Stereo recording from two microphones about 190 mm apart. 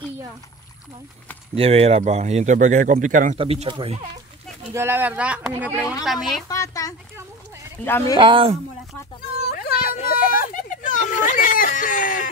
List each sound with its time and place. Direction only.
1.5 s speech: 30° right (ahead or behind)
3.3 s speech: 30° right (ahead or behind)
4.7 s speech: 10° right (ahead or behind)
6.5 s speech: 15° left (ahead or behind)
8.2 s speech: 25° right (ahead or behind)
9.4 s speech: 55° left (ahead or behind)